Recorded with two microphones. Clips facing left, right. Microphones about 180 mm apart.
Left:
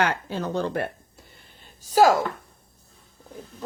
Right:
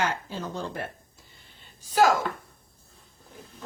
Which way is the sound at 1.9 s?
35° left (ahead or behind).